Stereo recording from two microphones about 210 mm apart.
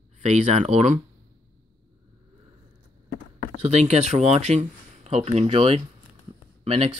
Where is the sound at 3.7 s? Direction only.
30° right (ahead or behind).